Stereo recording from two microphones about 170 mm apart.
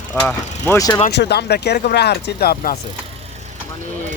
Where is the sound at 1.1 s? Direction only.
75° left (ahead or behind).